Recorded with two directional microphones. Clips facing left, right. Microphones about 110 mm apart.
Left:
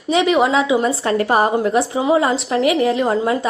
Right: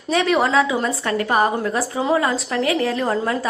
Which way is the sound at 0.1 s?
15° left (ahead or behind).